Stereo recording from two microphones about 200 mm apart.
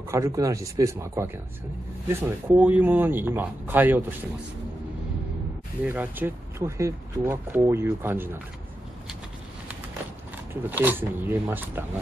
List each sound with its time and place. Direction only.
0.1 s speech: 15° right (ahead or behind)
5.9 s speech: 10° right (ahead or behind)
10.5 s speech: 10° right (ahead or behind)